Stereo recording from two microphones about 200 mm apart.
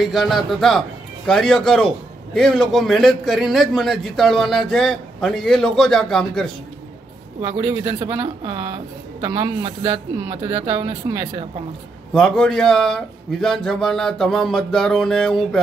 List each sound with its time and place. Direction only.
0.0 s a man's voice: centre (ahead or behind)
7.4 s speech: 20° right (ahead or behind)
12.1 s a man's voice: 5° left (ahead or behind)